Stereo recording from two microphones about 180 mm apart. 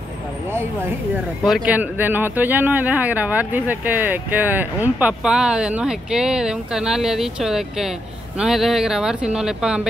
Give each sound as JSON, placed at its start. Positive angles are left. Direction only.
{"t": 1.4, "sound": "speech", "side_deg": -5}